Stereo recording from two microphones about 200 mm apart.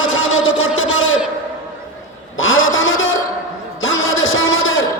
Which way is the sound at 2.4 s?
80° left.